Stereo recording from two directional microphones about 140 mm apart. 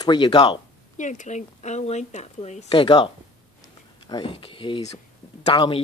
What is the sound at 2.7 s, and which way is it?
Speech, 35° left (ahead or behind).